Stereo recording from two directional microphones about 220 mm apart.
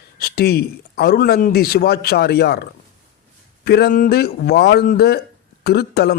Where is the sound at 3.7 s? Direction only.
45° left (ahead or behind).